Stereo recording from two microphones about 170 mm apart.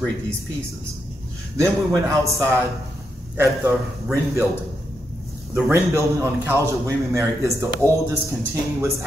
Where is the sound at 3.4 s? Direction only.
15° right (ahead or behind).